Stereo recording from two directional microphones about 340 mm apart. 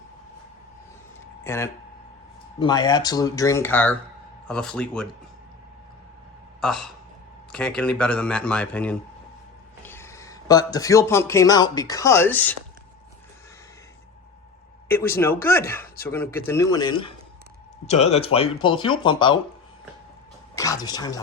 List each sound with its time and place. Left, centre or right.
1.5 s speech: centre
6.6 s a man's voice: centre
14.8 s speech: centre
20.6 s speech: centre